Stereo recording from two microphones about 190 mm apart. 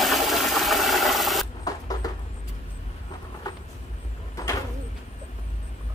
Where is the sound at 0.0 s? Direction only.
Centre (ahead or behind).